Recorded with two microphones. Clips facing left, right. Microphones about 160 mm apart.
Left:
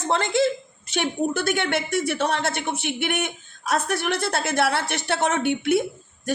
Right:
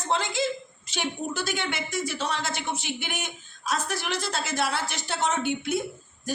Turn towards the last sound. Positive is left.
turn(degrees=70)  # may be behind; listen again after turning